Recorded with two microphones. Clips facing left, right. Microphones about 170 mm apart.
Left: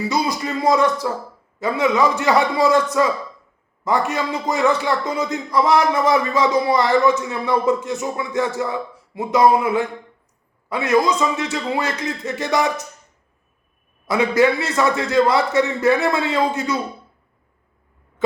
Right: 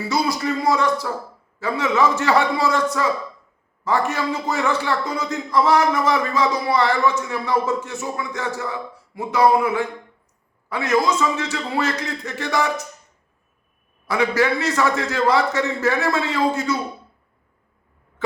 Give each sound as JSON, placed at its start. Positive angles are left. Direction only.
{"t": 0.1, "sound": "a man's voice", "side_deg": 20}
{"t": 14.1, "sound": "a man's voice", "side_deg": 20}